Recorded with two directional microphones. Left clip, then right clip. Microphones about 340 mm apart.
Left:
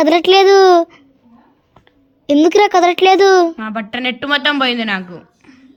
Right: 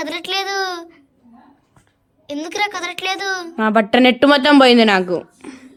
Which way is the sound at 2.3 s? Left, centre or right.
Centre.